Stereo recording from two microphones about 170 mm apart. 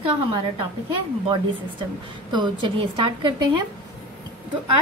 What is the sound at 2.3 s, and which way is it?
A woman's voice, 25° right (ahead or behind).